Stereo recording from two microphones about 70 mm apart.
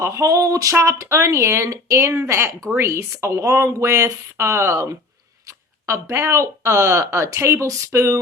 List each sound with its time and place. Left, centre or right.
0.0 s speech: right